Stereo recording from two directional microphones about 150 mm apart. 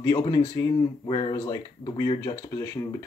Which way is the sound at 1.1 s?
35° left (ahead or behind).